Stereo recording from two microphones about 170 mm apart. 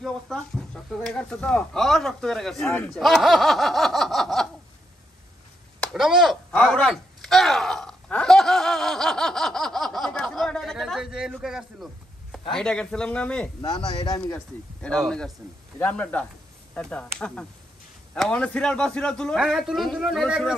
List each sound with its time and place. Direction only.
0.0 s speech: centre (ahead or behind)
5.8 s a sound: centre (ahead or behind)
12.5 s speech: 5° left (ahead or behind)
13.6 s a man's voice: 30° left (ahead or behind)
14.1 s speech: 15° left (ahead or behind); by 20.5 s 5° right (ahead or behind)